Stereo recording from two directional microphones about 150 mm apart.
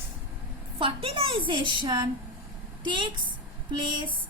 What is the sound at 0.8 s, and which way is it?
A woman's voice, 35° right (ahead or behind).